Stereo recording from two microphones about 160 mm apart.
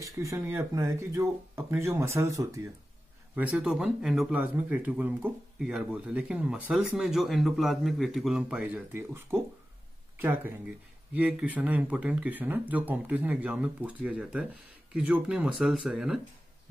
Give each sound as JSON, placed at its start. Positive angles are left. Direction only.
{"t": 0.0, "sound": "speech", "side_deg": -20}